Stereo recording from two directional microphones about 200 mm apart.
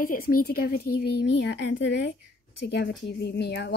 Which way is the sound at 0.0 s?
45° left (ahead or behind).